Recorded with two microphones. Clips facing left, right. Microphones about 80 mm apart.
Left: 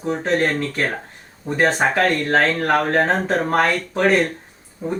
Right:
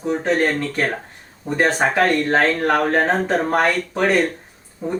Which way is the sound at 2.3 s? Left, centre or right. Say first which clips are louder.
Even; centre.